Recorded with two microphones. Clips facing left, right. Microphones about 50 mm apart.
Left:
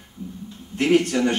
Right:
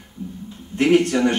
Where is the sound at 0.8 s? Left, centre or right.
Centre.